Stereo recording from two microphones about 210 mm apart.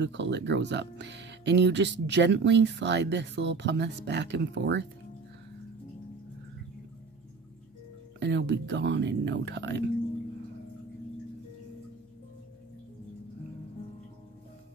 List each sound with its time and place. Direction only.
0.0 s speech: 55° right (ahead or behind)
8.2 s speech: 55° right (ahead or behind)